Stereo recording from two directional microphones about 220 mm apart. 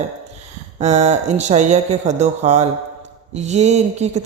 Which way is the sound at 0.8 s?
30° right (ahead or behind).